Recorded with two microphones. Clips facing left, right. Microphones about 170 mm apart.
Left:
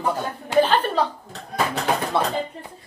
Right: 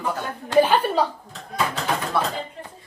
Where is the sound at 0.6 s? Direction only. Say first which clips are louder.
Right 1 dB; 10° right (ahead or behind).